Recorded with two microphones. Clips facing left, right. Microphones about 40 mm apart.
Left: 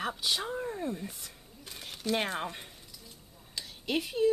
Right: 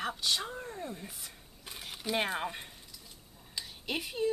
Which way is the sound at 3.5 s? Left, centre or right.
Centre.